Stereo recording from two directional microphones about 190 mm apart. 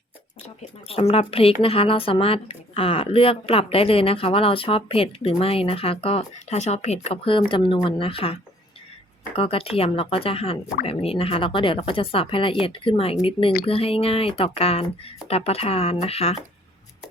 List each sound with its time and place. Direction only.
0.4 s speech: 30° left (ahead or behind)